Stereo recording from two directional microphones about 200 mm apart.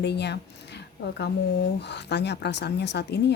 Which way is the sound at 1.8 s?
55° left (ahead or behind).